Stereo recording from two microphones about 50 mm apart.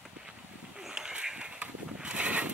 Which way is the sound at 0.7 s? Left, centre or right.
Centre.